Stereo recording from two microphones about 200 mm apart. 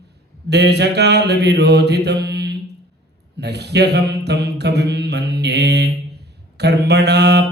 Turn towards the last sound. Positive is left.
turn(degrees=-55)  # may be behind; listen again after turning